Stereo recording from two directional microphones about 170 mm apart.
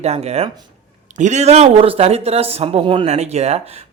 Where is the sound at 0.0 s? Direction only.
40° right (ahead or behind).